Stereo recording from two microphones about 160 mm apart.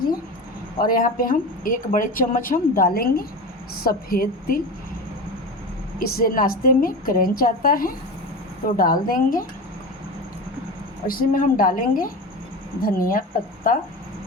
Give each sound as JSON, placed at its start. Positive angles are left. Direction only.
{"t": 0.8, "sound": "a woman's voice", "side_deg": 65}
{"t": 6.0, "sound": "a woman's voice", "side_deg": 70}
{"t": 11.0, "sound": "a woman's voice", "side_deg": 65}